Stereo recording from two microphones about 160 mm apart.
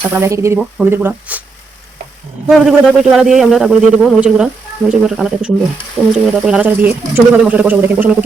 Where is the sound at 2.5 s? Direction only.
5° right (ahead or behind).